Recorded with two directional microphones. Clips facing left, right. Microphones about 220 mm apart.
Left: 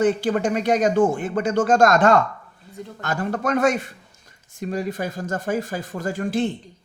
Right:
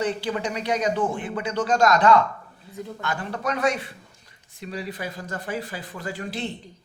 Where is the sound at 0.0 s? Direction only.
50° left (ahead or behind).